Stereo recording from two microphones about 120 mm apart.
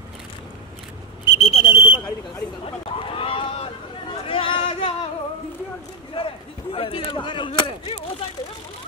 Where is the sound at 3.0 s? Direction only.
50° left (ahead or behind).